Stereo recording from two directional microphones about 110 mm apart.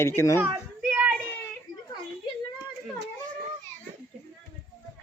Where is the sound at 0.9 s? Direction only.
15° right (ahead or behind).